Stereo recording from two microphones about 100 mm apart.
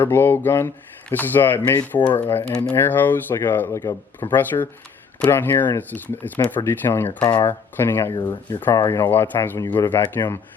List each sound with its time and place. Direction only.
0.0 s speech: 20° left (ahead or behind)
7.2 s speech: 50° left (ahead or behind)
7.4 s speech: 25° left (ahead or behind)
8.1 s speech: 45° left (ahead or behind)
8.7 s speech: 35° left (ahead or behind)
9.0 s speech: 20° left (ahead or behind)